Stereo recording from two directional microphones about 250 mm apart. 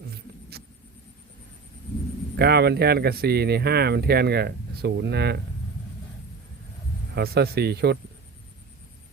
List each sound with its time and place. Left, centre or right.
2.3 s speech: right
7.1 s speech: right